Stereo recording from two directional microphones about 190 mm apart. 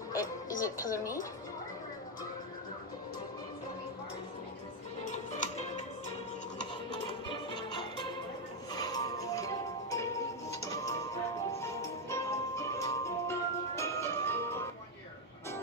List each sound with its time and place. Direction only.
0.1 s music: 20° left (ahead or behind)
5.1 s music: 40° left (ahead or behind)
7.2 s music: 25° left (ahead or behind)
12.1 s music: 15° left (ahead or behind)